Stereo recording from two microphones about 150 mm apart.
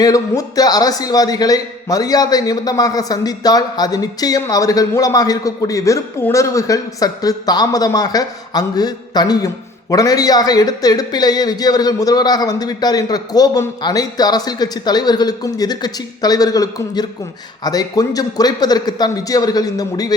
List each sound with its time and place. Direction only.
0.0 s a man's voice: 25° left (ahead or behind)